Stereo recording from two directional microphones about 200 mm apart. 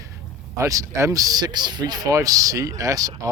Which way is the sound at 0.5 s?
15° right (ahead or behind).